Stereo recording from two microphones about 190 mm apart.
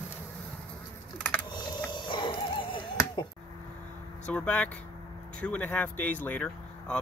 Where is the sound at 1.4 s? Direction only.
25° left (ahead or behind).